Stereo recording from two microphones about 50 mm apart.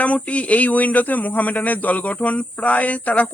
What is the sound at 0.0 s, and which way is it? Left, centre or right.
Speech, left.